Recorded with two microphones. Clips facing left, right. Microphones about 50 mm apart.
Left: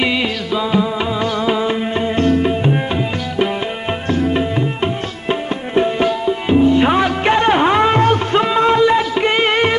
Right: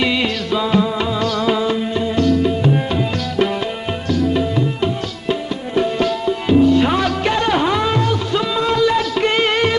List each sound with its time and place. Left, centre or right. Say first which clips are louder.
0.5 s music: even; centre
1.2 s music: even; centre
4.1 s music: even; left